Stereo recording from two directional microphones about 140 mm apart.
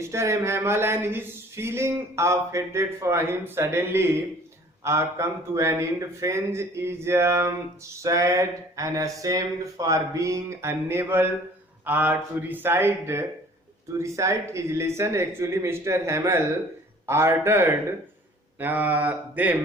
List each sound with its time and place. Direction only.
0.0 s speech: 20° right (ahead or behind)